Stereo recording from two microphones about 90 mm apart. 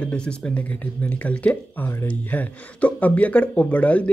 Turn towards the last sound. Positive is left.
turn(degrees=15)  # may be behind; listen again after turning